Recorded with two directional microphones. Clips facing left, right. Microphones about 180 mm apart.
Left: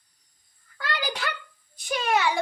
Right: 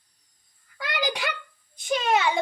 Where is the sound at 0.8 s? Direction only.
15° right (ahead or behind).